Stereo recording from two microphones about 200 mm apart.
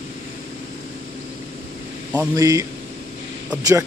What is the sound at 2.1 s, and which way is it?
Speech, 15° right (ahead or behind).